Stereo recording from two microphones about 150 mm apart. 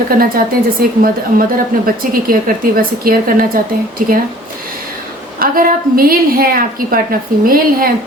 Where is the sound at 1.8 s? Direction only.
70° right (ahead or behind).